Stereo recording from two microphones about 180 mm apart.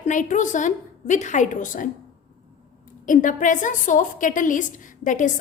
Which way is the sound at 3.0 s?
45° left (ahead or behind).